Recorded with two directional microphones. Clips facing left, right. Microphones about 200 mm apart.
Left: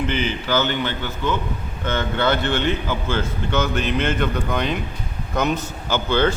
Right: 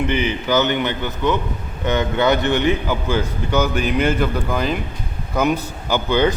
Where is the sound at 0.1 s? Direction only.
15° right (ahead or behind).